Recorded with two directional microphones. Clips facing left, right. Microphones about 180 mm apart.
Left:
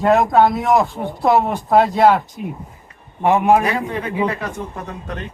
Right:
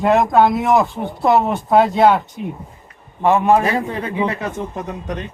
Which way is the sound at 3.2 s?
15° left (ahead or behind).